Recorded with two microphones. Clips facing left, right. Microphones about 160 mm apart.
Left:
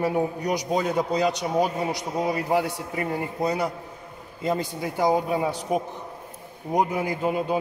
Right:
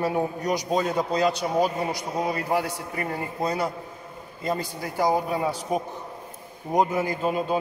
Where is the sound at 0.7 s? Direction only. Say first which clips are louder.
Left 1 dB; 15° left (ahead or behind).